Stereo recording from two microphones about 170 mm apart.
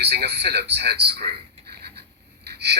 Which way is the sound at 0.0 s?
75° right (ahead or behind).